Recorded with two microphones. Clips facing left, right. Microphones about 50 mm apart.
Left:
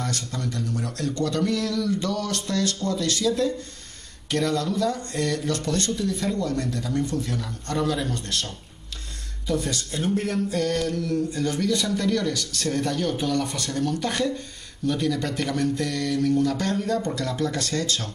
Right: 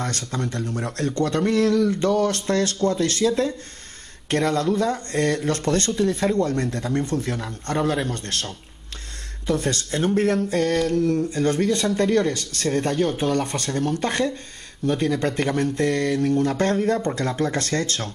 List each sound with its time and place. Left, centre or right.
0.0 s speech: right